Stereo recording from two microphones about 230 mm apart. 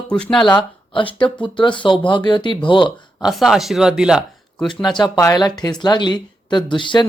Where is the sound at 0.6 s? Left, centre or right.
Left.